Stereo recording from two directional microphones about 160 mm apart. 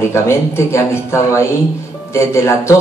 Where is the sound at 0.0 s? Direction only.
15° left (ahead or behind).